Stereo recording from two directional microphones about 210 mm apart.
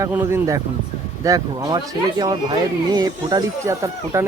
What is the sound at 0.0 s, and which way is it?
Speech, 10° right (ahead or behind).